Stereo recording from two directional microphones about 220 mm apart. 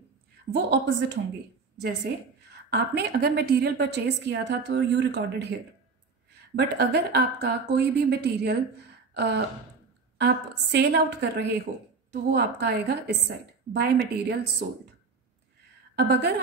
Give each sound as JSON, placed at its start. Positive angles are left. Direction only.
{"t": 0.5, "sound": "a woman's voice", "side_deg": -50}
{"t": 2.5, "sound": "a woman's voice", "side_deg": -45}
{"t": 6.5, "sound": "a woman's voice", "side_deg": -45}